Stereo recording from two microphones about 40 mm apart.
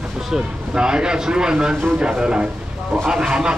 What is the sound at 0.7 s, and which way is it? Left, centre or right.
Speech, right.